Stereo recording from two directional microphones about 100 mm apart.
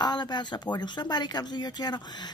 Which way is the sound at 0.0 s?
45° left (ahead or behind).